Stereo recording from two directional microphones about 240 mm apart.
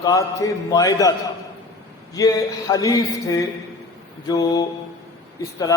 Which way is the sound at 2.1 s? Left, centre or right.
Centre.